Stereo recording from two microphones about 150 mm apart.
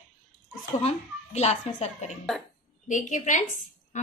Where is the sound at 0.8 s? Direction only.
50° left (ahead or behind).